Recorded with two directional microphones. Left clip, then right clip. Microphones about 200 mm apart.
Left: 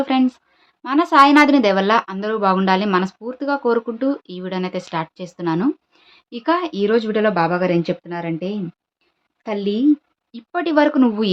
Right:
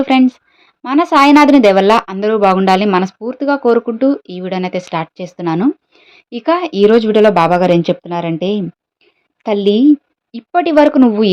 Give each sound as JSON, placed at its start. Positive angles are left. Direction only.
{"t": 0.0, "sound": "a woman's voice", "side_deg": -25}
{"t": 10.3, "sound": "a woman's voice", "side_deg": -25}